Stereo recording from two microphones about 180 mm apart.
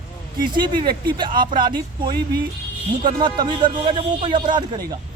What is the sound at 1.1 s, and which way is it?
Speech, 25° right (ahead or behind).